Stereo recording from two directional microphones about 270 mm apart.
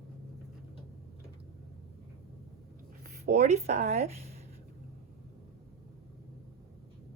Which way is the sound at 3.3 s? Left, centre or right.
Right.